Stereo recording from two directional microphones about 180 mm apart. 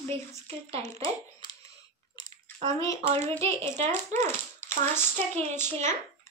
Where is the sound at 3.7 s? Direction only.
40° right (ahead or behind).